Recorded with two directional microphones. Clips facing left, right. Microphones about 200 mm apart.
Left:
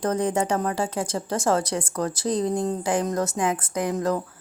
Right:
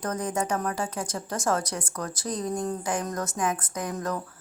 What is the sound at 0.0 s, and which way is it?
Speech, 30° left (ahead or behind).